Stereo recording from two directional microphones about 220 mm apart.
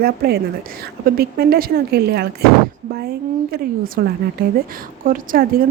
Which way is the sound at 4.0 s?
45° right (ahead or behind).